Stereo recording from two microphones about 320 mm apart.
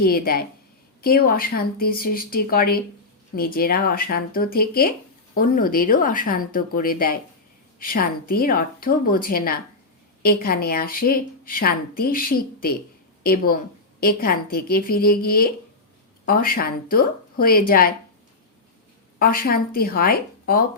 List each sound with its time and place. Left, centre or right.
0.0 s speech: left
19.2 s speech: left